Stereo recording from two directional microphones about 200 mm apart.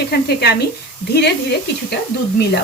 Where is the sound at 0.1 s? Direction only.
55° left (ahead or behind).